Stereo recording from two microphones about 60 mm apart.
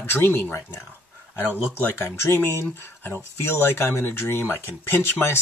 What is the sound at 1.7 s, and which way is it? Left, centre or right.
Speech, left.